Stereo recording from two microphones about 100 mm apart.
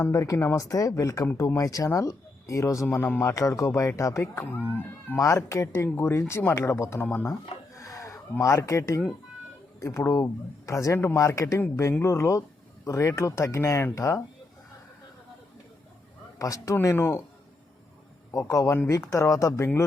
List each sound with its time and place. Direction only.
0.0 s speech: 35° left (ahead or behind)
2.8 s speech: 20° left (ahead or behind)
4.2 s speech: 20° left (ahead or behind)
7.8 s a sound: 30° left (ahead or behind)
8.4 s speech: 30° left (ahead or behind)
16.4 s speech: 35° left (ahead or behind)
18.3 s speech: 30° left (ahead or behind)